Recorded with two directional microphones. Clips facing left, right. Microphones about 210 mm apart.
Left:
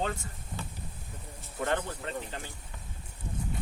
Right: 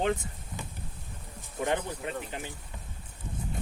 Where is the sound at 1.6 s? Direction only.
10° right (ahead or behind).